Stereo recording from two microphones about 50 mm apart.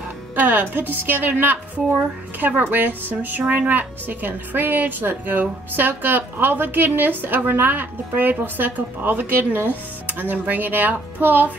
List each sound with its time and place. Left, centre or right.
0.4 s a woman's voice: right